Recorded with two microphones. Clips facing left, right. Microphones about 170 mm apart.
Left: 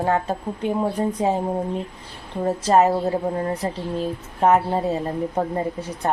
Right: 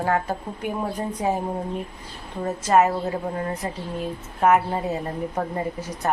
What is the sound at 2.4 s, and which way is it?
Speech, 35° left (ahead or behind).